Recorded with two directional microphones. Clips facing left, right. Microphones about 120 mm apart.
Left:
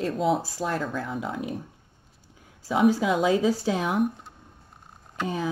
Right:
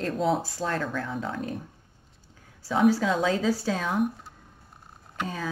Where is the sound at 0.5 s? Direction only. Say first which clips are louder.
Left 1 dB; 10° left (ahead or behind).